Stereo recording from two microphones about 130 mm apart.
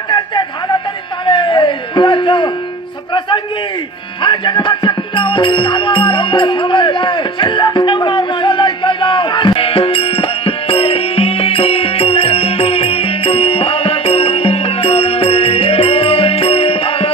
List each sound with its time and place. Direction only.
0.1 s a sound: 35° left (ahead or behind)
3.1 s a man's voice: 35° left (ahead or behind)
4.2 s music: 35° left (ahead or behind)